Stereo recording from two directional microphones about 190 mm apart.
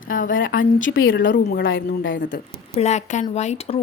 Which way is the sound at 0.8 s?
90° left.